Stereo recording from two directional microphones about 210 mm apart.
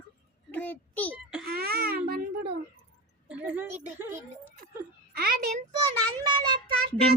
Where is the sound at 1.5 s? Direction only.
45° right (ahead or behind).